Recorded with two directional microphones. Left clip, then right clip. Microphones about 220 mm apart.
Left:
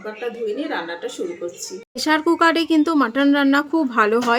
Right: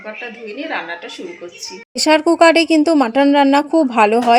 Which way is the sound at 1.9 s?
20° right (ahead or behind).